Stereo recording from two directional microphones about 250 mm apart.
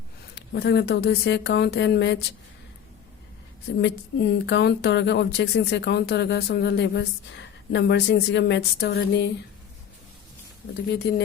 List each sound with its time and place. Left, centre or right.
0.3 s speech: left
3.8 s speech: left